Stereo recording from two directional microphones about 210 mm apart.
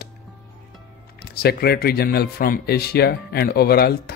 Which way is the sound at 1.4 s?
50° left (ahead or behind).